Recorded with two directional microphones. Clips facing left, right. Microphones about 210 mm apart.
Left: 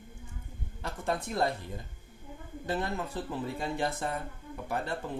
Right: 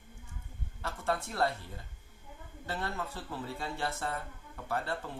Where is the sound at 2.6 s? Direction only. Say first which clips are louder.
Left 4 dB; 15° left (ahead or behind).